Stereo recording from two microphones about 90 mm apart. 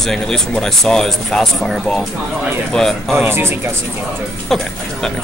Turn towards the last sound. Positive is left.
turn(degrees=5)  # may be behind; listen again after turning